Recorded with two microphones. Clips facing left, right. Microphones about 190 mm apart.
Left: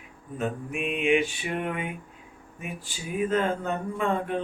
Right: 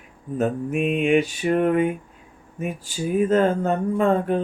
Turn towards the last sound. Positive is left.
turn(degrees=-40)  # may be behind; listen again after turning